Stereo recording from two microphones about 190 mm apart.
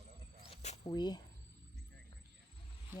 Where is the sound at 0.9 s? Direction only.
20° left (ahead or behind).